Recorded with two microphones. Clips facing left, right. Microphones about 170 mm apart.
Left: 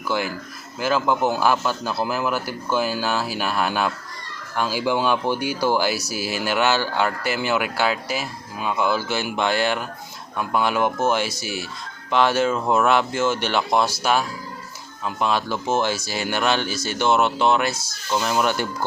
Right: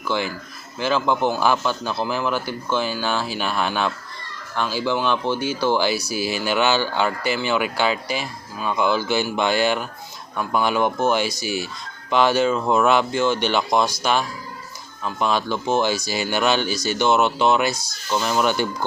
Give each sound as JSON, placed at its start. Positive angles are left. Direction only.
{"t": 0.1, "sound": "speech", "side_deg": 5}